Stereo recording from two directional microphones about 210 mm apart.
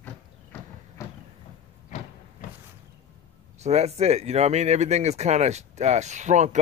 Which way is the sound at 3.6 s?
30° right (ahead or behind).